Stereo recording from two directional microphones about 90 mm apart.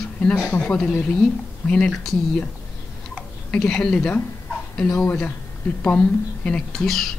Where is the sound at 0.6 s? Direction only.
10° left (ahead or behind).